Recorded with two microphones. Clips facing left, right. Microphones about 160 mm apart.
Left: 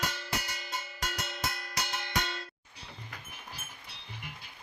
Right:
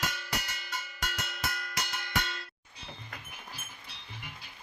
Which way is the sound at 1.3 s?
30° left (ahead or behind).